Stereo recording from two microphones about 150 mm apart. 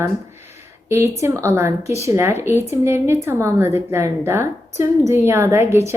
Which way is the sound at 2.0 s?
15° right (ahead or behind).